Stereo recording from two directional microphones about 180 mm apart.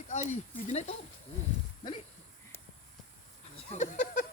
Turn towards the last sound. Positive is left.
turn(degrees=45)  # may be behind; listen again after turning